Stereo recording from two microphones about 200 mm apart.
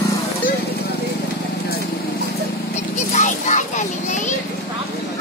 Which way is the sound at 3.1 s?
35° left (ahead or behind).